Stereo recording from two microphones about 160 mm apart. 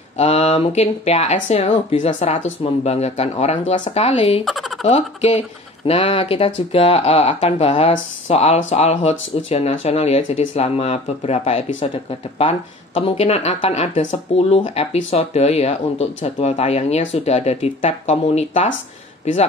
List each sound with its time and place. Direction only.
0.2 s speech: 40° left (ahead or behind)
4.5 s fowl: centre (ahead or behind)
4.8 s speech: 40° left (ahead or behind)